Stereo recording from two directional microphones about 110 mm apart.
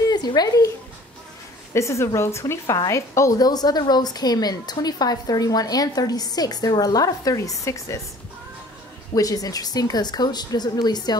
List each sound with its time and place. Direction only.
0.1 s a child's voice: 40° left (ahead or behind)
1.7 s a woman's voice: 25° left (ahead or behind)
9.1 s a woman's voice: 35° left (ahead or behind)